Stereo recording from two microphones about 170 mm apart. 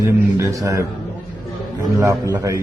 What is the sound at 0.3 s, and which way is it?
A man's voice, 20° right (ahead or behind).